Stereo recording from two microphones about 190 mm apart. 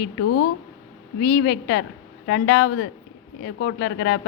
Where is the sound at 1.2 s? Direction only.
60° left (ahead or behind).